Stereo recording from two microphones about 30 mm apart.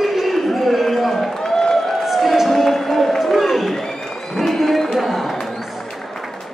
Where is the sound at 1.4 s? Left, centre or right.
Centre.